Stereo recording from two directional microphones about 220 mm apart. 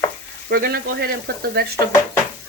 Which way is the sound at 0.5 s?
45° right (ahead or behind).